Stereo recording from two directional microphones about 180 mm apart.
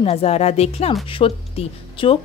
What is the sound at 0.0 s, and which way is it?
A woman's voice, 35° left (ahead or behind).